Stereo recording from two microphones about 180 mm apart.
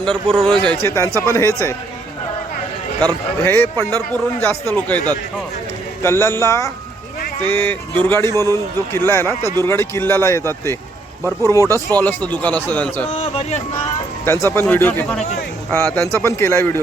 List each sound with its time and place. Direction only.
0.0 s a man's voice: 25° right (ahead or behind)
0.3 s a man's voice: 5° left (ahead or behind)
3.4 s speech: 10° left (ahead or behind)
6.0 s speech: 15° left (ahead or behind)
13.1 s speech: 35° left (ahead or behind)
14.3 s speech: 15° left (ahead or behind)